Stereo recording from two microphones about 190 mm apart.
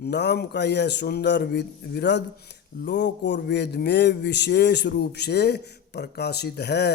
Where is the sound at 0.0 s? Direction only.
60° left (ahead or behind).